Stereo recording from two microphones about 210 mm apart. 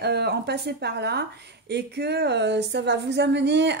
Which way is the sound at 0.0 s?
50° right (ahead or behind).